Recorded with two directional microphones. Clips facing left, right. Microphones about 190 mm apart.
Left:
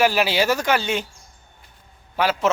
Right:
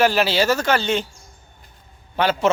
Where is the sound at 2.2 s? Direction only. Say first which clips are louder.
Right 2 dB; 5° left (ahead or behind).